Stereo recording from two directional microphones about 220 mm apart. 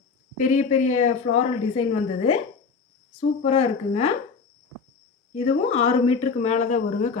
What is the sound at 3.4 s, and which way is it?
Speech, 30° left (ahead or behind).